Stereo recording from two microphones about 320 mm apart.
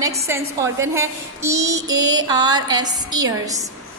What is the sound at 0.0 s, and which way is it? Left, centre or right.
A woman's voice, centre.